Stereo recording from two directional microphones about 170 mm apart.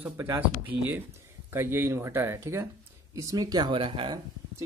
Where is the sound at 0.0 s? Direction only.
10° right (ahead or behind); by 4.2 s 30° right (ahead or behind).